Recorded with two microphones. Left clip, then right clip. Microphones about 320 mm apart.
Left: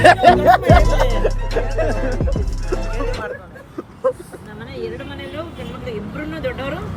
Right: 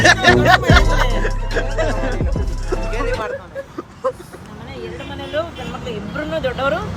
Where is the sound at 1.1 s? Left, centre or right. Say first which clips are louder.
Left 1 dB; centre.